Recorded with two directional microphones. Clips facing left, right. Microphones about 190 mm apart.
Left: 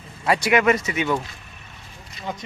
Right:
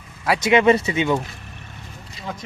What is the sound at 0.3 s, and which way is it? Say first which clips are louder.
Speech: right 4 dB; 25° right (ahead or behind).